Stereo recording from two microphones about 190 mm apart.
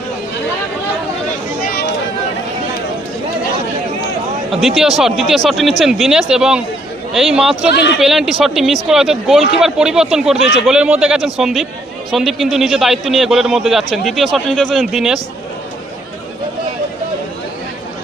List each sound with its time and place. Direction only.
1.6 s a sound: 50° left (ahead or behind)
4.5 s a man's voice: centre (ahead or behind)
7.7 s speech: 65° left (ahead or behind)
8.0 s a man's voice: centre (ahead or behind)